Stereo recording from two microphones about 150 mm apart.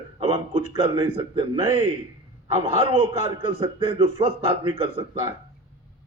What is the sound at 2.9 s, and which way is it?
A man's voice, 35° right (ahead or behind).